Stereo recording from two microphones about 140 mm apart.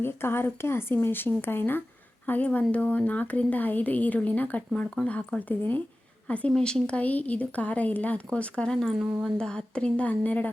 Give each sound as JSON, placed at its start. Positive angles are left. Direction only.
{"t": 0.0, "sound": "speech", "side_deg": 15}